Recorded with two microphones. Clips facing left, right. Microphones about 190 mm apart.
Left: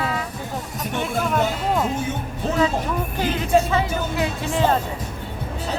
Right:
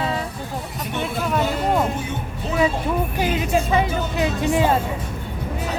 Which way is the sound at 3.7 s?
15° right (ahead or behind).